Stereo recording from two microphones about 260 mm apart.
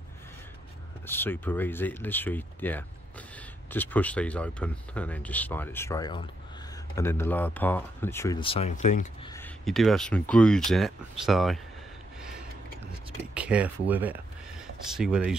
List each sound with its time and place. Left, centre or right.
1.0 s speech: centre; by 9.3 s left
9.3 s speech: centre
13.3 s speech: centre